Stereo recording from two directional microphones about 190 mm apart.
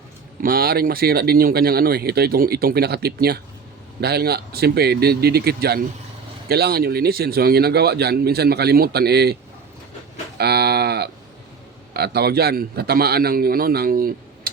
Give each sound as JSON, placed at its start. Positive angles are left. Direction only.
{"t": 0.4, "sound": "speech", "side_deg": -55}
{"t": 10.3, "sound": "livestock", "side_deg": -55}
{"t": 11.9, "sound": "speech", "side_deg": -60}